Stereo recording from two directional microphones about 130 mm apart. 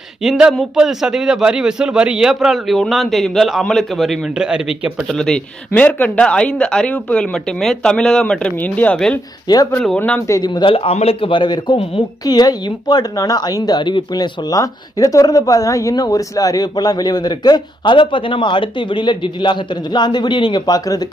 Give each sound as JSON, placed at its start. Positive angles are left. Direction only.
{"t": 0.2, "sound": "a man's voice", "side_deg": 0}
{"t": 5.1, "sound": "a man's voice", "side_deg": 5}
{"t": 10.2, "sound": "speech", "side_deg": 30}
{"t": 12.3, "sound": "speech", "side_deg": 30}